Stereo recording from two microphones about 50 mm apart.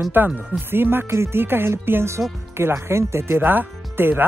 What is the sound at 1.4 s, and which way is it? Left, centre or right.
Speech, right.